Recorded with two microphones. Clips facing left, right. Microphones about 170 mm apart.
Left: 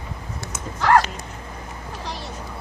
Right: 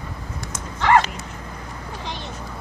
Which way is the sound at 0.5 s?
Centre (ahead or behind).